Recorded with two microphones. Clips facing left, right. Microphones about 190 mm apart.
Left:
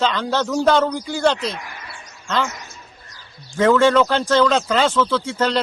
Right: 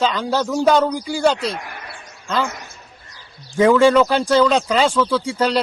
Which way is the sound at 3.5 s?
15° right (ahead or behind).